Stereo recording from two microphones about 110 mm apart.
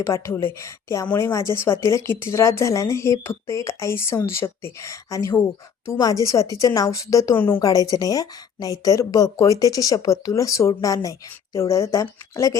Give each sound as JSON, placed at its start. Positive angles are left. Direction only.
{"t": 0.0, "sound": "speech", "side_deg": 25}
{"t": 7.3, "sound": "speech", "side_deg": 20}
{"t": 7.6, "sound": "a woman's voice", "side_deg": 30}